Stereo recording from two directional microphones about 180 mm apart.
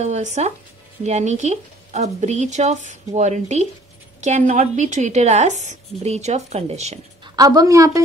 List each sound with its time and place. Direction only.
0.0 s a woman's voice: 40° right (ahead or behind)
7.3 s a woman's voice: 20° right (ahead or behind)